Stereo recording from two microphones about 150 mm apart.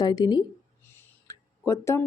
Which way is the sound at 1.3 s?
20° left (ahead or behind).